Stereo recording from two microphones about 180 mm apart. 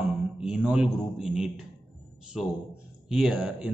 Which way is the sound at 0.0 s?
5° right (ahead or behind).